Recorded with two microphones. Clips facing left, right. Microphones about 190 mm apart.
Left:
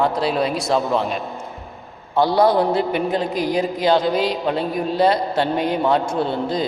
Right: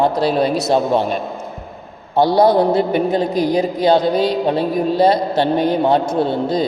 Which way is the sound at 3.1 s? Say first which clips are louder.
Right 4 dB; 35° right (ahead or behind).